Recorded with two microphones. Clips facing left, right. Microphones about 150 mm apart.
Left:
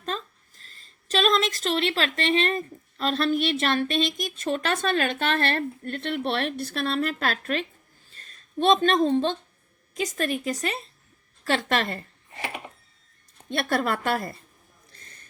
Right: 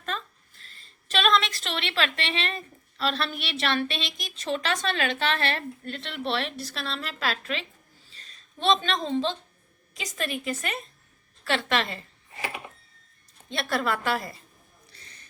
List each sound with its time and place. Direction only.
0.0 s a woman's voice: 35° left (ahead or behind)
13.5 s a woman's voice: 50° left (ahead or behind)
14.9 s a sound: 50° left (ahead or behind)